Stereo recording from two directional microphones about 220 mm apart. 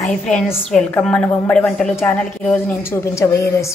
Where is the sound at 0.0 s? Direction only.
5° left (ahead or behind).